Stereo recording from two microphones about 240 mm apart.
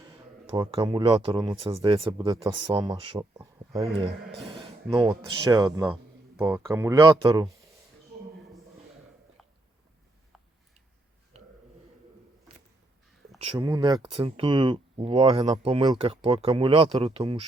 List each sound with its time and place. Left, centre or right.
0.1 s speech: centre
3.9 s speech: right
4.9 s speech: centre
11.3 s a sound: right
13.4 s speech: right